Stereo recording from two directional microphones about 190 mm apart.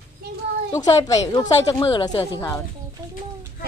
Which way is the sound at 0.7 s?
15° left (ahead or behind).